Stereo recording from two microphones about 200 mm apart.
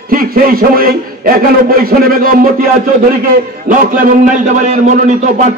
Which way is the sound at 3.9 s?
40° right (ahead or behind).